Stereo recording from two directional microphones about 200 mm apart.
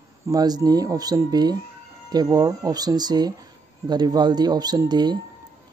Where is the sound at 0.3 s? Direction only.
20° right (ahead or behind).